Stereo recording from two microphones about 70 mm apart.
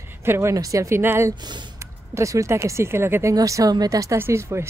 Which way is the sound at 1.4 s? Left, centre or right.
Right.